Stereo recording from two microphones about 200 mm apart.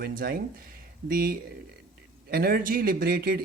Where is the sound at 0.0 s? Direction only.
45° right (ahead or behind).